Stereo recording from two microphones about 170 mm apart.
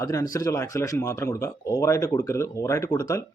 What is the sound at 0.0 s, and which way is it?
Speech, 20° left (ahead or behind).